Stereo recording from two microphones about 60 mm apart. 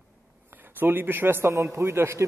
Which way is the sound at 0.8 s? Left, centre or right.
Right.